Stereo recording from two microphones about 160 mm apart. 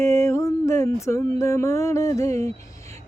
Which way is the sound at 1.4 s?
20° left (ahead or behind).